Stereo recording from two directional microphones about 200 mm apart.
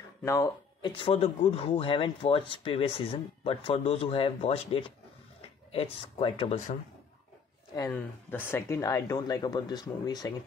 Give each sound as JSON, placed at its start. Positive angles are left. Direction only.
{"t": 0.2, "sound": "speech", "side_deg": 15}
{"t": 7.7, "sound": "speech", "side_deg": 10}